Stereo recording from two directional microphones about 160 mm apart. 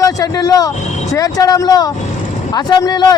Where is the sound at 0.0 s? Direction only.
25° left (ahead or behind).